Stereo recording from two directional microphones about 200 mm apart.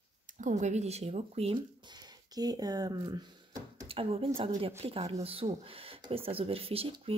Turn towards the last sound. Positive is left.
turn(degrees=-30)  # may be behind; listen again after turning